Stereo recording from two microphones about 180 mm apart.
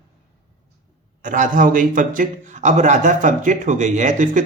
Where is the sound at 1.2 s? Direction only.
45° right (ahead or behind).